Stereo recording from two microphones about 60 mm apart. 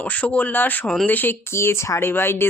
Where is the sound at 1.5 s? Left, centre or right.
Left.